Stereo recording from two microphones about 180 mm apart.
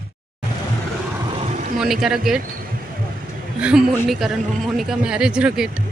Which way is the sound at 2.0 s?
Centre (ahead or behind).